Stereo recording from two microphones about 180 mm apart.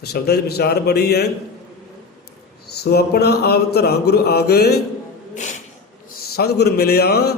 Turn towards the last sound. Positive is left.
turn(degrees=65)  # may be behind; listen again after turning